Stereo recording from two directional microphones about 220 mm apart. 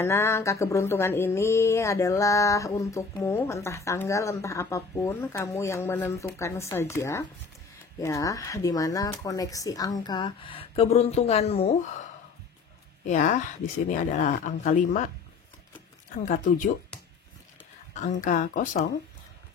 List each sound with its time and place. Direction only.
0.0 s speech: 10° left (ahead or behind); by 11.8 s 25° left (ahead or behind)
13.0 s speech: 35° left (ahead or behind)
16.3 s speech: 35° left (ahead or behind)
18.2 s speech: 35° left (ahead or behind)